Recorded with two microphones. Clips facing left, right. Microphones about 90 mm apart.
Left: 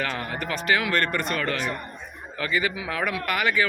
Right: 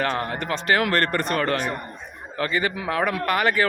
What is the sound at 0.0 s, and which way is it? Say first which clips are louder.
A man's voice: right 4 dB; 35° right (ahead or behind).